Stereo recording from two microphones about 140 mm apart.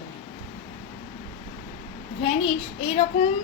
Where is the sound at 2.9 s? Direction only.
55° left (ahead or behind).